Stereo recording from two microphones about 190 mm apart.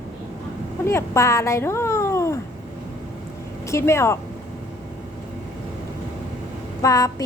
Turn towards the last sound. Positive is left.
turn(degrees=15)  # may be behind; listen again after turning